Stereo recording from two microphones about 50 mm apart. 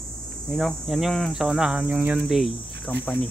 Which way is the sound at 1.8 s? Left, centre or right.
Right.